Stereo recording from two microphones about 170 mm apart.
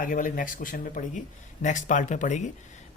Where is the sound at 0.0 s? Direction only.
50° left (ahead or behind).